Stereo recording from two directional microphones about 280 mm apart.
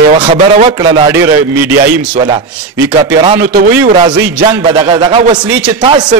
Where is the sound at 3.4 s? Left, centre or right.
Right.